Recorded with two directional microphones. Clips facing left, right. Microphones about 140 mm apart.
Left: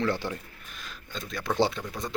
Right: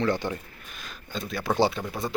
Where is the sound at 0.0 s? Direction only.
Centre (ahead or behind).